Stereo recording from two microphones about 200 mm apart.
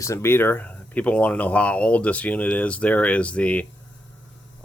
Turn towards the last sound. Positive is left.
turn(degrees=5)  # may be behind; listen again after turning